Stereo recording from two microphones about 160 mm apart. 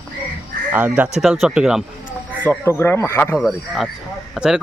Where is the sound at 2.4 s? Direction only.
15° left (ahead or behind).